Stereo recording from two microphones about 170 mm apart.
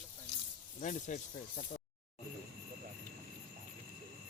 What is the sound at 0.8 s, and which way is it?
Speech, 45° left (ahead or behind).